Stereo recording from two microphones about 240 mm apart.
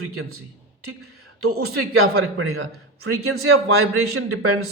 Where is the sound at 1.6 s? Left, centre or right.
Right.